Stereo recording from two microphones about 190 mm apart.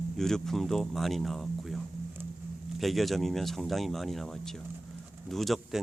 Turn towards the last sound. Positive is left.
turn(degrees=0)  # may be behind; listen again after turning